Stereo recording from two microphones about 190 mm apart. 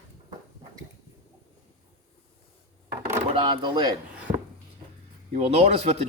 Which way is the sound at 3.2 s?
25° right (ahead or behind).